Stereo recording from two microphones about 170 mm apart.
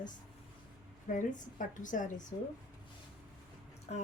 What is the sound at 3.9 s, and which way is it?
Speech, 40° left (ahead or behind).